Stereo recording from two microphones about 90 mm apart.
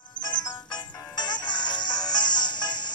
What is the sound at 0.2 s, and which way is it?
Music, 55° left (ahead or behind).